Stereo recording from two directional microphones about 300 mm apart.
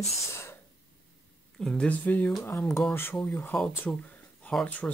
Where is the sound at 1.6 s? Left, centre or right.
Centre.